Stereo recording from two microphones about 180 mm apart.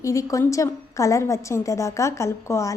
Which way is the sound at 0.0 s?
15° left (ahead or behind).